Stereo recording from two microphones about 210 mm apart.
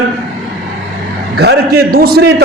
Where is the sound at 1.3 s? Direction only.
50° right (ahead or behind).